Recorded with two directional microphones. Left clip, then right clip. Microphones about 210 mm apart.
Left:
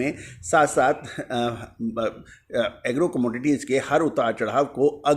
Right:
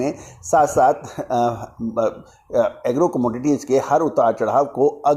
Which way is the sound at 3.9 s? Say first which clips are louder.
Right 5 dB; 20° left (ahead or behind).